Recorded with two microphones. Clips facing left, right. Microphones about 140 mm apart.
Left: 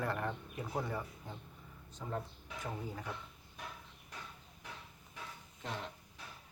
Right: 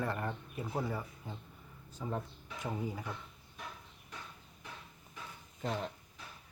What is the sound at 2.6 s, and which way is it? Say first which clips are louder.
Speech: right 4 dB; 15° right (ahead or behind).